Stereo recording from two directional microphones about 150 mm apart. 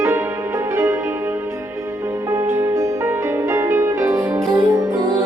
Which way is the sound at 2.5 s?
15° right (ahead or behind).